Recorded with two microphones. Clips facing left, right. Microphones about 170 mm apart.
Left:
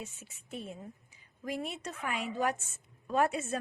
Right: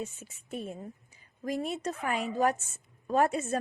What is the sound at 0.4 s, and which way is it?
A woman's voice, 45° right (ahead or behind).